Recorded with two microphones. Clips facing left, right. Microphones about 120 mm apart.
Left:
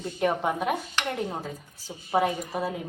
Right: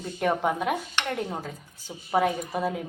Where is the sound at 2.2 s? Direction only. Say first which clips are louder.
Right 1 dB; centre (ahead or behind).